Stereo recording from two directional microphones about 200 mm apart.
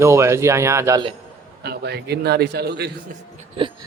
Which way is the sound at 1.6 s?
55° right (ahead or behind).